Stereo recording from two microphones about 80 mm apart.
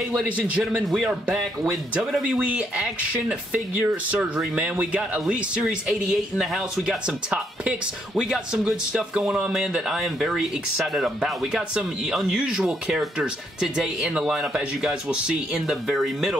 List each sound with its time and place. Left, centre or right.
0.1 s a man's voice: centre
2.2 s speech: centre